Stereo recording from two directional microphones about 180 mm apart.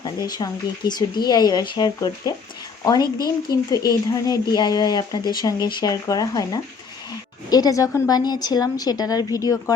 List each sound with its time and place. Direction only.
0.0 s speech: 20° left (ahead or behind)